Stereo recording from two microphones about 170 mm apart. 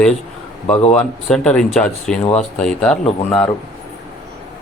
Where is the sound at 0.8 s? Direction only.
40° left (ahead or behind).